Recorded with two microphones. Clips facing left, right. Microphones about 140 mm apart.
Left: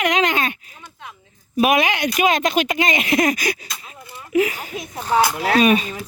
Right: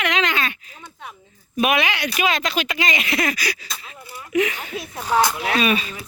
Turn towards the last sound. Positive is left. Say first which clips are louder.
# left 5 dB
turn(degrees=45)  # may be behind; listen again after turning